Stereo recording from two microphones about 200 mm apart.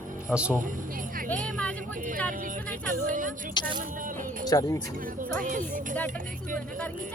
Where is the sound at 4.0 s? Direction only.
40° right (ahead or behind).